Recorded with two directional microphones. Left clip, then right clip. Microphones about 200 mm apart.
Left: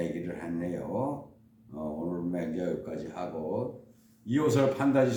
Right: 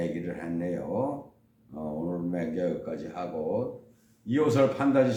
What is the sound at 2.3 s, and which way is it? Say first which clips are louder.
Speech: right 3 dB; 5° right (ahead or behind).